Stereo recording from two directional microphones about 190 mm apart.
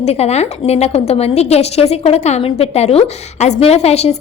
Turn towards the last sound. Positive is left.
turn(degrees=35)  # may be behind; listen again after turning